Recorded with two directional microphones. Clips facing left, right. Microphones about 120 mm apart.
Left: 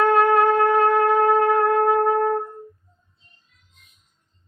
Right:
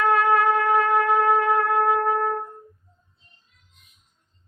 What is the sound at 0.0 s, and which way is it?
Shofar, 40° left (ahead or behind).